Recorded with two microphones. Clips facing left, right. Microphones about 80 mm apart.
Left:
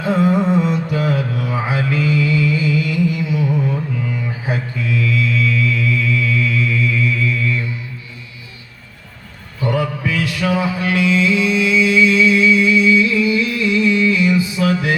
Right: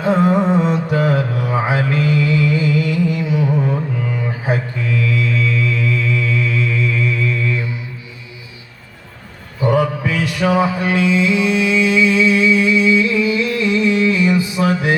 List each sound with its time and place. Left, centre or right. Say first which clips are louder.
0.2 s mantra: right 1 dB; right
10.0 s music: right 2 dB; right